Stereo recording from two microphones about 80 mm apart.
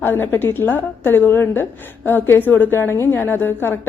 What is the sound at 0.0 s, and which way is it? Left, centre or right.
A woman's voice, left.